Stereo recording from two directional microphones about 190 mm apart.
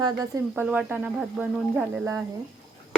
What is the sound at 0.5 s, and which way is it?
Speech, 5° right (ahead or behind).